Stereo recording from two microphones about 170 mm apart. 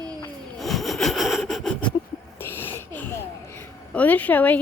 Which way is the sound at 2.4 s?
15° left (ahead or behind).